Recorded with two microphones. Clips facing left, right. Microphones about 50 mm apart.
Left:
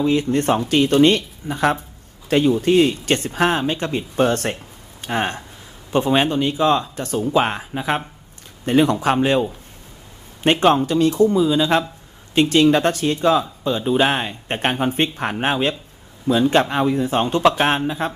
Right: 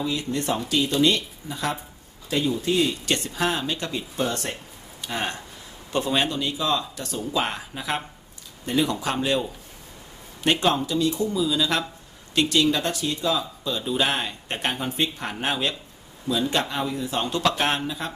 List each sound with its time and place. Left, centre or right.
0.0 s speech: left
4.2 s speech: left
4.9 s speech: left
8.6 s speech: left
13.7 s speech: left